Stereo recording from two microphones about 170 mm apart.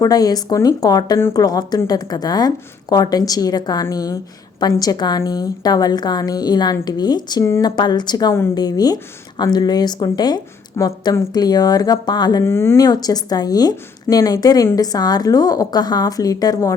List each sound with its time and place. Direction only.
0.0 s speech: 20° left (ahead or behind)